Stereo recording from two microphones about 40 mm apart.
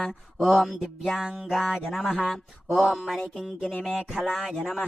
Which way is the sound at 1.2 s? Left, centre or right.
Centre.